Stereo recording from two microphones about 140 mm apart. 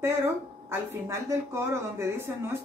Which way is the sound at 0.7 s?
20° right (ahead or behind).